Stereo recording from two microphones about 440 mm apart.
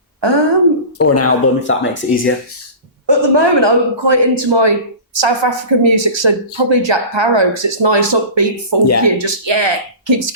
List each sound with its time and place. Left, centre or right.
0.2 s throat clearing: right
0.9 s speech: left
3.1 s speech: right